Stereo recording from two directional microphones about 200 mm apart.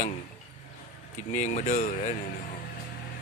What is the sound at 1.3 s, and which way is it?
Speech, 35° left (ahead or behind).